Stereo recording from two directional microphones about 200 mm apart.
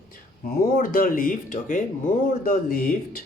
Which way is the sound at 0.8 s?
45° left (ahead or behind).